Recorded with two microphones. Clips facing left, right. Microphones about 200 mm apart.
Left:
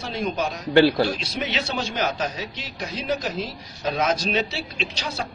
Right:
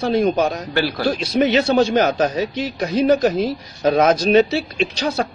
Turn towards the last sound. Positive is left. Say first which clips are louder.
# right 9 dB
turn(degrees=-50)  # may be behind; listen again after turning